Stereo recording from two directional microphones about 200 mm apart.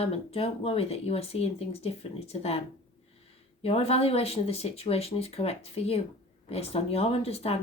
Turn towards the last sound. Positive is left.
turn(degrees=30)  # may be behind; listen again after turning